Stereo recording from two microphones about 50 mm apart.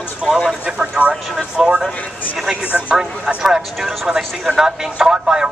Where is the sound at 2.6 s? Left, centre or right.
Right.